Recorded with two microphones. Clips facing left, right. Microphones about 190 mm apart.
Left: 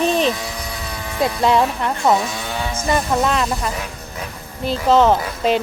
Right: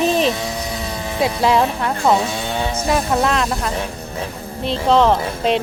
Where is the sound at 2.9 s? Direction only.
Centre (ahead or behind).